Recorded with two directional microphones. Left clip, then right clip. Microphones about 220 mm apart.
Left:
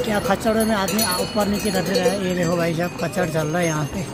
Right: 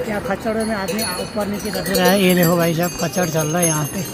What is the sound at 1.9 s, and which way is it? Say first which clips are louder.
Speech: right 9 dB; 30° right (ahead or behind).